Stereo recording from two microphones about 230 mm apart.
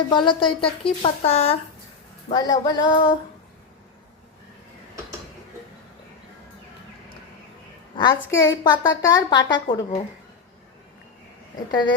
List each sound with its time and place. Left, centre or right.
0.1 s a woman's voice: left
7.9 s a woman's voice: centre